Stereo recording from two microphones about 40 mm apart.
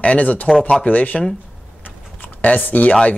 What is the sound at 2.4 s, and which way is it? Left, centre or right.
Speech, left.